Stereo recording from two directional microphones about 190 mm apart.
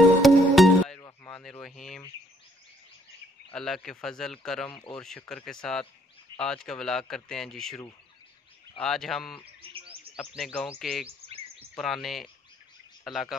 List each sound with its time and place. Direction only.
0.2 s music: centre (ahead or behind)
1.0 s a sound: 15° left (ahead or behind)
1.4 s speech: centre (ahead or behind)
3.5 s speech: centre (ahead or behind)
9.6 s bird: 30° right (ahead or behind)
10.1 s speech: 5° left (ahead or behind)